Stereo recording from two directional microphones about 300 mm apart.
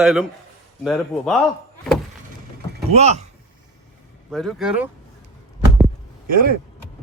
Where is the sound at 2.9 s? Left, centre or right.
Right.